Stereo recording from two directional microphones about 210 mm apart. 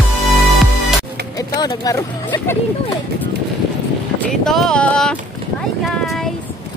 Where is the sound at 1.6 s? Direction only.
20° left (ahead or behind).